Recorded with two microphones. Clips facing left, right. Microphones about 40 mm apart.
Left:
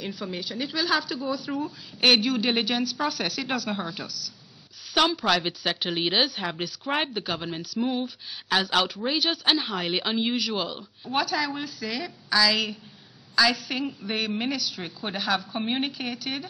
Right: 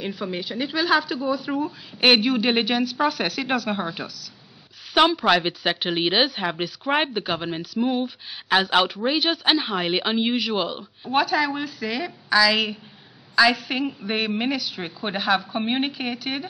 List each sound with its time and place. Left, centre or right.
0.0 s speech: centre
7.8 s a sound: centre
8.5 s speech: right
15.6 s speech: centre
15.9 s speech: centre